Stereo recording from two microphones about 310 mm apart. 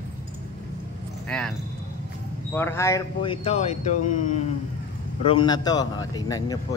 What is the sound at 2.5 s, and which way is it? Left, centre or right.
Speech, centre.